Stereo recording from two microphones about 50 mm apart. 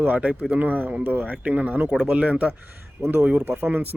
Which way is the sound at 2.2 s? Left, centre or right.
Right.